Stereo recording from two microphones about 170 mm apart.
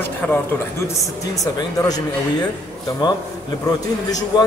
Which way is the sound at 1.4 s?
20° left (ahead or behind).